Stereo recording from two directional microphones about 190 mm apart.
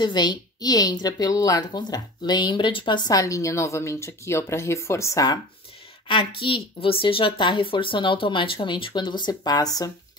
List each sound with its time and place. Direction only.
0.0 s a woman's voice: 25° left (ahead or behind)